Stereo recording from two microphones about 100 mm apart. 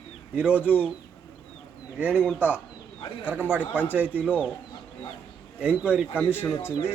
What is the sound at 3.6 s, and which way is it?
Speech, 20° left (ahead or behind).